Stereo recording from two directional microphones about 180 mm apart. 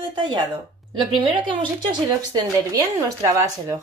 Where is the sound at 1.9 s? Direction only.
20° right (ahead or behind).